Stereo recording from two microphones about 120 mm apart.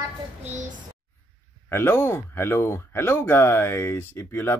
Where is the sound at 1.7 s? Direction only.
20° left (ahead or behind).